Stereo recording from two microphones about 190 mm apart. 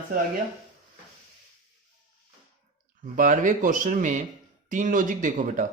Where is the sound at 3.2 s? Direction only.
45° right (ahead or behind).